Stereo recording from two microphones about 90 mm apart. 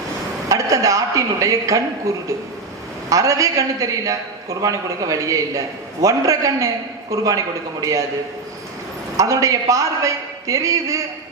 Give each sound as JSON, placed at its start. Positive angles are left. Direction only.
{"t": 0.4, "sound": "a man's voice", "side_deg": -40}
{"t": 9.1, "sound": "a man's voice", "side_deg": -35}